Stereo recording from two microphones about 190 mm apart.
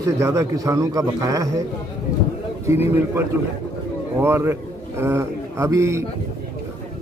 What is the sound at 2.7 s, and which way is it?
A man's voice, 15° right (ahead or behind).